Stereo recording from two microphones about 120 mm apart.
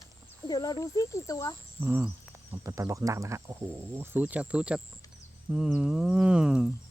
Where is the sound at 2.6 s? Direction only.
25° right (ahead or behind); by 4.8 s 10° right (ahead or behind).